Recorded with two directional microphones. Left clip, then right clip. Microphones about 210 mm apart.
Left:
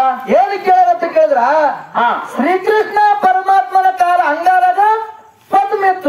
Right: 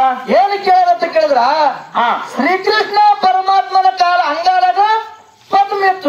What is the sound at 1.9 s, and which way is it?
Speech, 35° right (ahead or behind).